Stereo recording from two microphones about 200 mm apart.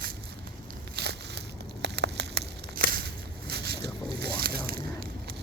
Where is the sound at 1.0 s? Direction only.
55° right (ahead or behind).